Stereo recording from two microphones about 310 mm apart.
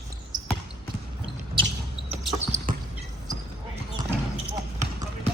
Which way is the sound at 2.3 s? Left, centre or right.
Right.